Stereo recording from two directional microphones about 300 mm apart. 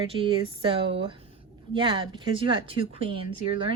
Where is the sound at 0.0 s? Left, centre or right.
Centre.